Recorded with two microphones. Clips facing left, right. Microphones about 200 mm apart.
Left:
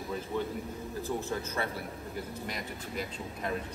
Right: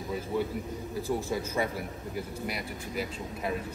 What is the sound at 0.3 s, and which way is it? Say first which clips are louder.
Speech: right 4 dB; 10° right (ahead or behind).